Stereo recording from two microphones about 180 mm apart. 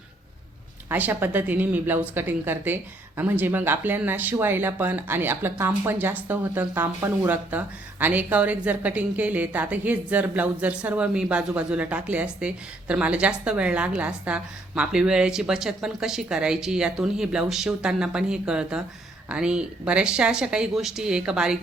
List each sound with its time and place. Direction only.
0.9 s speech: 10° right (ahead or behind)